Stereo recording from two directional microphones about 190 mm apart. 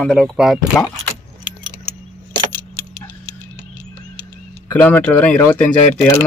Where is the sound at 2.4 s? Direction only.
15° right (ahead or behind).